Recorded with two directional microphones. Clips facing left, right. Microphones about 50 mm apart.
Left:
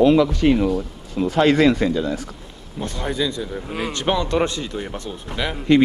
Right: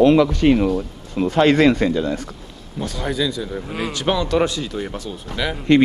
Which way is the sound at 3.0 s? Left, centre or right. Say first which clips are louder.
Right 1 dB; centre.